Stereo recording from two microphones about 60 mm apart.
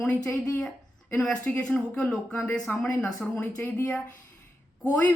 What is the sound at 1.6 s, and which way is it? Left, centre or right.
Speech, centre.